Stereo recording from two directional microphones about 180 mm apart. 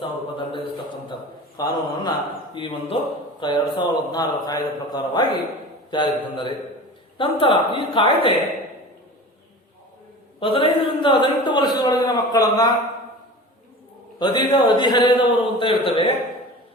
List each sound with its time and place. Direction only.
0.0 s a sound: 25° left (ahead or behind)
1.5 s a man's voice: 20° left (ahead or behind)
10.4 s a man's voice: 30° left (ahead or behind)
14.2 s a man's voice: 25° left (ahead or behind)